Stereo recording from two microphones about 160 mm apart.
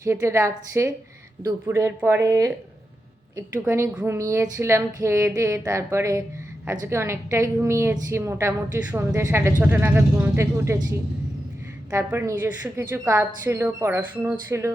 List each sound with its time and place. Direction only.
0.0 s a woman's voice: 20° right (ahead or behind)